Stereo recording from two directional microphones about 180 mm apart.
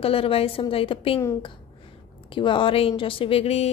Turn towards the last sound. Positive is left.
turn(degrees=35)  # may be behind; listen again after turning